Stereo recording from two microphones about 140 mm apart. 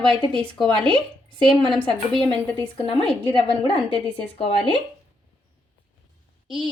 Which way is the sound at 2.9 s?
40° left (ahead or behind).